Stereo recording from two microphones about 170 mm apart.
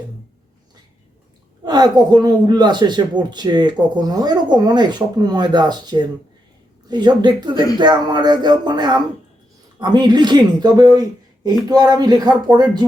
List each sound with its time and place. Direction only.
1.6 s speech: 25° right (ahead or behind)